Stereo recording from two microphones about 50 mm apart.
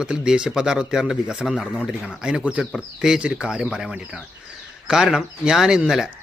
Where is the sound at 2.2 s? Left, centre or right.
Centre.